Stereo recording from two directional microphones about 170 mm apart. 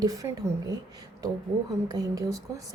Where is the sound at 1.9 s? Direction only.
20° right (ahead or behind).